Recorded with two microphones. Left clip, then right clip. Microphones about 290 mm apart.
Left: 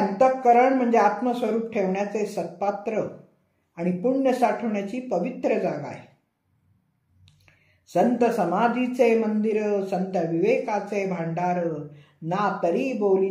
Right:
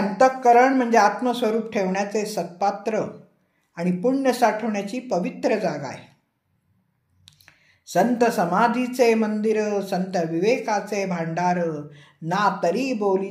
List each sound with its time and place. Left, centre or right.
0.2 s speech: right
7.3 s a sound: right
7.8 s speech: right